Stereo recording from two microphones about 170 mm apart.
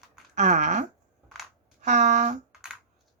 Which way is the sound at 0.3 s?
45° right (ahead or behind).